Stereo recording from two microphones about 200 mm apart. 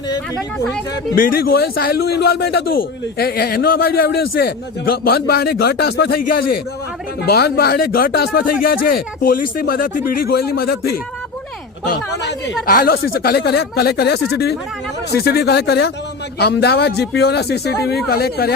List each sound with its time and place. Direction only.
1.1 s a man's voice: 45° left (ahead or behind)
12.6 s a man's voice: 45° left (ahead or behind)